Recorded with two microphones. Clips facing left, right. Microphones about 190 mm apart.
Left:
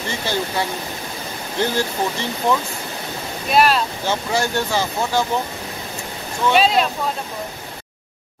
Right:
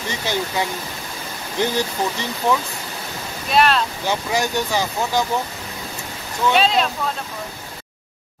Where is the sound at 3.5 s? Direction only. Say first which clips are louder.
Left 1 dB; 5° left (ahead or behind).